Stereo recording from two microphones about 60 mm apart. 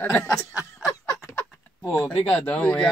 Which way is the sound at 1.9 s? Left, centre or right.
Left.